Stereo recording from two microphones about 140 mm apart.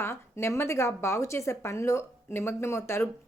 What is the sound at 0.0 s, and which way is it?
Speech, 15° left (ahead or behind).